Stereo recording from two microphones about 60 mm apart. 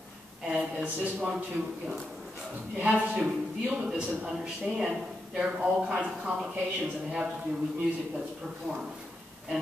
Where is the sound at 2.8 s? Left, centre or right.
Right.